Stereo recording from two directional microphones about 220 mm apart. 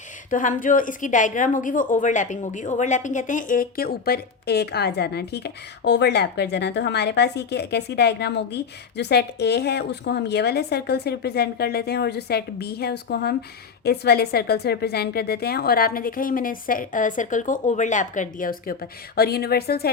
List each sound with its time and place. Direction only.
0.3 s a woman's voice: 35° left (ahead or behind)